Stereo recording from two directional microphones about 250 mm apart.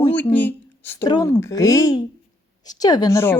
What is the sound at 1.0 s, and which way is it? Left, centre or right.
A woman's voice, centre.